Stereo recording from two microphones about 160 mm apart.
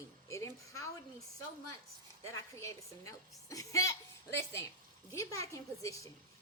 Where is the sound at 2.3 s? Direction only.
20° left (ahead or behind).